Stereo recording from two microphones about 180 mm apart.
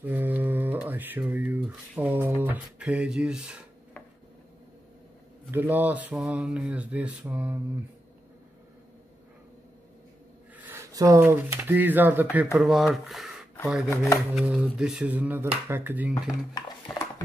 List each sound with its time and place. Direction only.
0.0 s speech: 10° right (ahead or behind)
5.5 s speech: 10° right (ahead or behind)
10.6 s speech: 15° right (ahead or behind)
13.8 s speech: 15° left (ahead or behind)
14.3 s a sound: 5° right (ahead or behind)
15.7 s speech: 10° right (ahead or behind)
16.5 s a sound: 20° left (ahead or behind)